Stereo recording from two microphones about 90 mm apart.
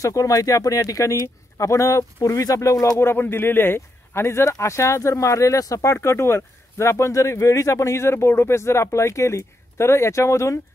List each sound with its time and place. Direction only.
0.0 s speech: 40° left (ahead or behind)